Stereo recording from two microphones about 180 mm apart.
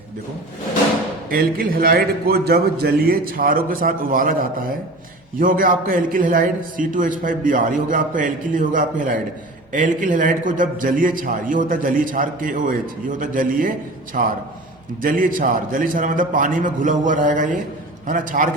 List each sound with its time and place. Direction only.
1.3 s a man's voice: 55° right (ahead or behind)